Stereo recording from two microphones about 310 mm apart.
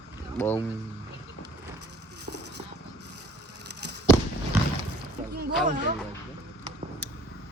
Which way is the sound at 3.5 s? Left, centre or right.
Right.